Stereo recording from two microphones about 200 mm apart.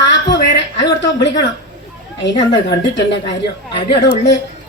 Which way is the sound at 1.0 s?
60° left (ahead or behind).